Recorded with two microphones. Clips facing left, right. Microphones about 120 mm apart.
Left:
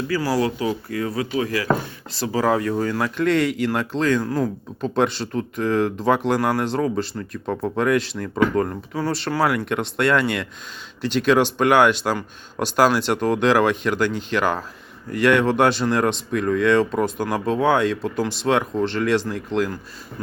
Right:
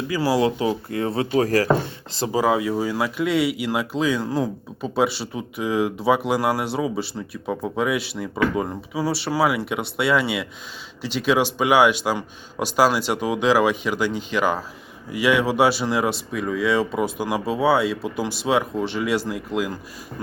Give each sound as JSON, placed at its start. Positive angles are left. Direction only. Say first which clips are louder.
{"t": 0.1, "sound": "speech", "louder": "right 2 dB", "side_deg": -20}
{"t": 2.3, "sound": "speech", "louder": "even", "side_deg": -5}